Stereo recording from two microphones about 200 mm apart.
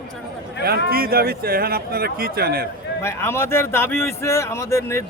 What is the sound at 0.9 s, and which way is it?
Speech, 50° right (ahead or behind).